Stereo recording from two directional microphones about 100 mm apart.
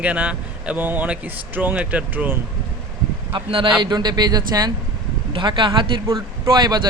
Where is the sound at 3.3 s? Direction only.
60° right (ahead or behind).